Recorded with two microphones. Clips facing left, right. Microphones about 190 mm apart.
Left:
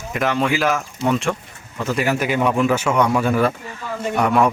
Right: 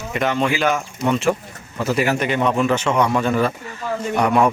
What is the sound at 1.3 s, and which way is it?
Speech, 15° right (ahead or behind).